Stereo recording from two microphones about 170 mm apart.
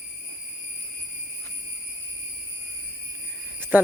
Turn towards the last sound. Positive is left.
turn(degrees=-10)  # may be behind; listen again after turning